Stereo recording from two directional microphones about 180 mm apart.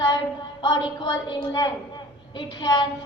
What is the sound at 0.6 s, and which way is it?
A woman's voice, 25° left (ahead or behind).